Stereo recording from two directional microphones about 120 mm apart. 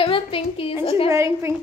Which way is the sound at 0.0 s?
50° left (ahead or behind).